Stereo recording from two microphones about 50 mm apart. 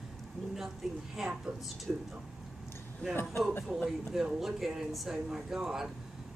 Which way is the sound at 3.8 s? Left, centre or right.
Centre.